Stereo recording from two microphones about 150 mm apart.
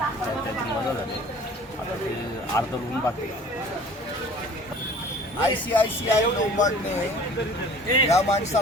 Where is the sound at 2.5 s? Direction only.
20° left (ahead or behind).